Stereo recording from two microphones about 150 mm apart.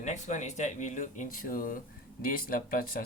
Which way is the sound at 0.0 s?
55° left (ahead or behind).